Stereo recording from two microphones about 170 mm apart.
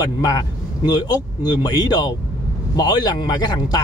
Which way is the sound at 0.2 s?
20° left (ahead or behind).